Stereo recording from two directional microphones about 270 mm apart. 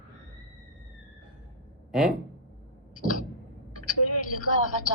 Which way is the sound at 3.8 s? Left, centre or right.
Left.